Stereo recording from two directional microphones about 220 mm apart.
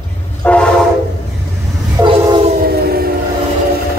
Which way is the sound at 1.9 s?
25° right (ahead or behind).